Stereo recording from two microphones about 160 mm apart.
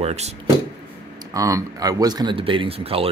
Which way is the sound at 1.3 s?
20° right (ahead or behind).